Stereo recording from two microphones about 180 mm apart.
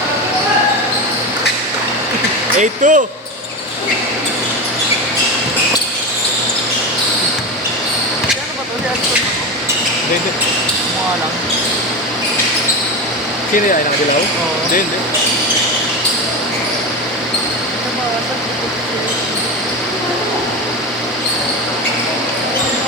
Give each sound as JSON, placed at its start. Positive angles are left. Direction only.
{"t": 2.6, "sound": "speech", "side_deg": -45}